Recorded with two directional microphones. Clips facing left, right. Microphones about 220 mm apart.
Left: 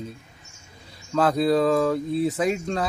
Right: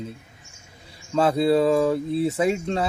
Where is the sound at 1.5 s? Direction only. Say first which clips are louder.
Right 1 dB; 5° right (ahead or behind).